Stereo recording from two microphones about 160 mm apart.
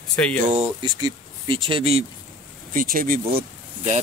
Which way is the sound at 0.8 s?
30° right (ahead or behind).